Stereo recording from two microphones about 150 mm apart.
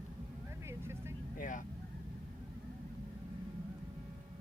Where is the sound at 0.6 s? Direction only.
15° right (ahead or behind).